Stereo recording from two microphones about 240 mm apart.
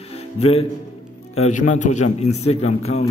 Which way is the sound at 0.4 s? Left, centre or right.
Left.